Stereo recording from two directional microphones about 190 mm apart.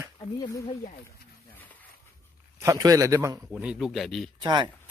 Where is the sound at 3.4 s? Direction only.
Centre (ahead or behind).